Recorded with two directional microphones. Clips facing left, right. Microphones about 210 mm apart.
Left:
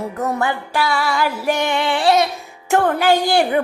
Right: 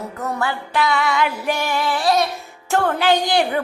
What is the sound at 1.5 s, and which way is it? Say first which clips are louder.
Music: left 3 dB; 25° left (ahead or behind).